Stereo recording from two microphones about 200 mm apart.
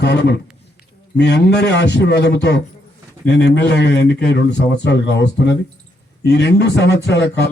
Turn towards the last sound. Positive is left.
turn(degrees=60)  # may be behind; listen again after turning